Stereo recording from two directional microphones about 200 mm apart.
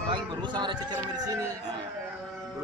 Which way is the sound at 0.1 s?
25° right (ahead or behind).